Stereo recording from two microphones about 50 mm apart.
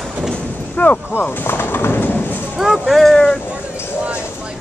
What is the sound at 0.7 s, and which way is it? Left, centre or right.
Speech, left.